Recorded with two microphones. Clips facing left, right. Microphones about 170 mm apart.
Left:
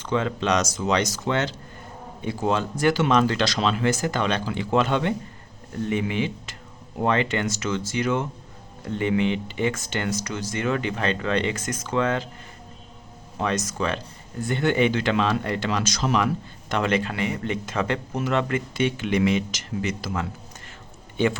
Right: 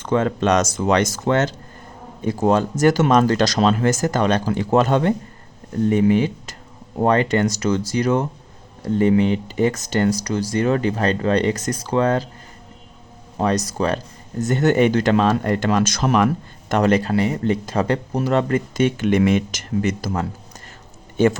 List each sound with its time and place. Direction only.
0.0 s speech: 45° right (ahead or behind)
13.4 s speech: 35° right (ahead or behind)